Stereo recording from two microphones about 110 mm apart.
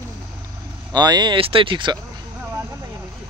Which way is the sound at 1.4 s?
55° right (ahead or behind).